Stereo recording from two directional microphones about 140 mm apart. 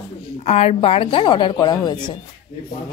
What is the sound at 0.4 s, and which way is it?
A woman's voice, 50° left (ahead or behind).